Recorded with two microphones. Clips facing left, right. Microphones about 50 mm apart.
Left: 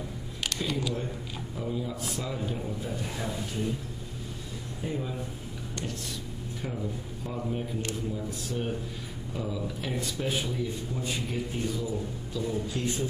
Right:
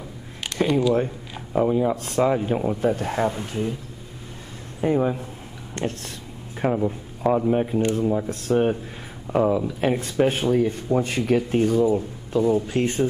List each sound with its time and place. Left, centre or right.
0.5 s a sound: right
1.6 s speech: right
4.8 s speech: right
6.6 s speech: right